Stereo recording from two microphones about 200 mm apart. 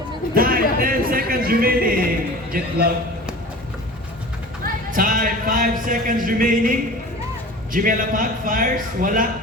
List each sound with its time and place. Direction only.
0.3 s speech: 45° right (ahead or behind)
4.6 s speech: 45° right (ahead or behind)